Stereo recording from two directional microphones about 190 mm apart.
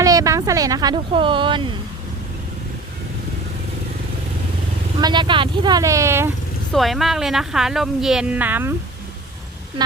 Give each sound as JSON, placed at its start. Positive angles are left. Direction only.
{"t": 0.0, "sound": "speech", "side_deg": -20}
{"t": 4.9, "sound": "speech", "side_deg": -20}
{"t": 6.7, "sound": "a woman's voice", "side_deg": 0}